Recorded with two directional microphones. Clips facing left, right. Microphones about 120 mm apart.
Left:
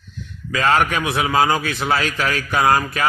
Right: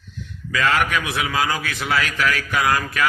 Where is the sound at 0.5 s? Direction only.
30° left (ahead or behind).